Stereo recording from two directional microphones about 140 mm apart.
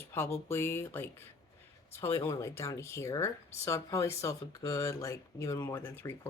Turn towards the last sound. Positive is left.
turn(degrees=15)  # may be behind; listen again after turning